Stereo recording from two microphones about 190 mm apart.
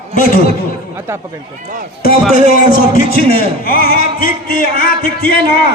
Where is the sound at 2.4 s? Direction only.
45° left (ahead or behind).